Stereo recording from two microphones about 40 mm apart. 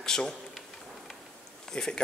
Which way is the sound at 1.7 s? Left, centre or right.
Centre.